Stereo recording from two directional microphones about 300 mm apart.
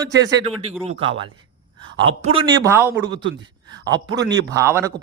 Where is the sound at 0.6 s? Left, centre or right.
Centre.